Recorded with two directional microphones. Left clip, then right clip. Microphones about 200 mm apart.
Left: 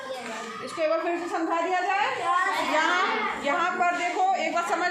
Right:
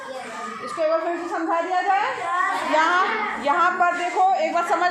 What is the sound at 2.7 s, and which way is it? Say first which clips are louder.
Speech: right 6 dB; 25° right (ahead or behind).